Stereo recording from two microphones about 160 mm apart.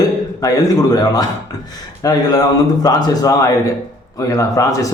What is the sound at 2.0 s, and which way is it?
Speech, 20° left (ahead or behind).